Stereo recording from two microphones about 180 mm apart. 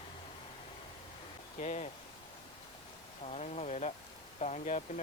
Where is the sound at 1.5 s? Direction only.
40° left (ahead or behind).